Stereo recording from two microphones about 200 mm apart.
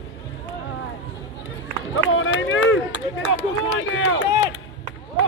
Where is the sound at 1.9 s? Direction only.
85° left.